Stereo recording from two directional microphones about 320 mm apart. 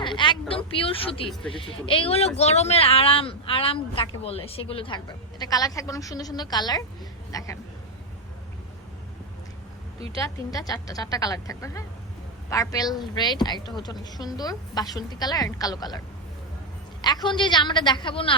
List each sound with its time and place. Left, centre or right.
0.0 s speech: centre
10.5 s speech: centre
17.0 s speech: centre